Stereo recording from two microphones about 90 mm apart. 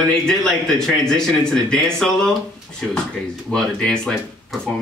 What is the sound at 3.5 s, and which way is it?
Speech, 10° left (ahead or behind).